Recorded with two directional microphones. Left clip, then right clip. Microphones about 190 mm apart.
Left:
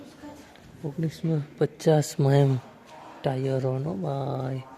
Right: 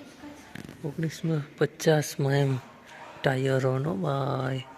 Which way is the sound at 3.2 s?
Centre (ahead or behind).